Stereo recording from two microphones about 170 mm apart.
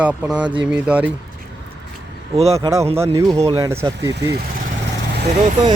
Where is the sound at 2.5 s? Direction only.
20° right (ahead or behind).